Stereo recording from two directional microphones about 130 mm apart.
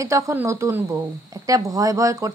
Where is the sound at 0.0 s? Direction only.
25° right (ahead or behind).